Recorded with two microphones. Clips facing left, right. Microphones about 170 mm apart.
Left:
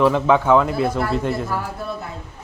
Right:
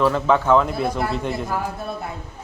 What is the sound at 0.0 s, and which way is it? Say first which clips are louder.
Speech: left 2 dB; 10° left (ahead or behind).